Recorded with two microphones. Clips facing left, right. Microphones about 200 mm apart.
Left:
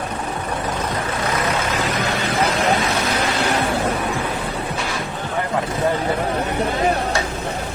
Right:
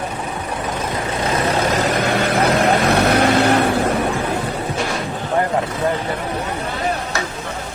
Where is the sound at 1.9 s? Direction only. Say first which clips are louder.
Right 4 dB; 60° right (ahead or behind).